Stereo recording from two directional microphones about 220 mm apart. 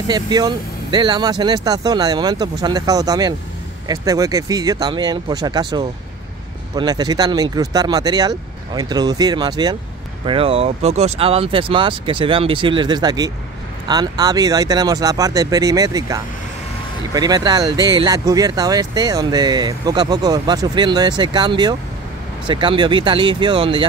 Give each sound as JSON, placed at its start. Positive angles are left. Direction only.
{"t": 0.1, "sound": "speech", "side_deg": -20}